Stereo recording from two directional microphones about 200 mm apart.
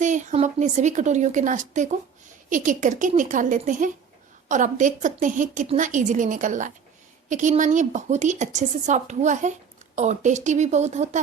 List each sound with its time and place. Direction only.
0.0 s a woman's voice: 40° right (ahead or behind)